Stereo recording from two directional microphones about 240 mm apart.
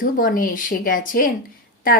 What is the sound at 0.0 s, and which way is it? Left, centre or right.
A woman's voice, left.